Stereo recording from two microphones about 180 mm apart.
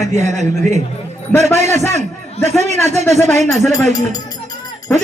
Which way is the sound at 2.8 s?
40° right (ahead or behind).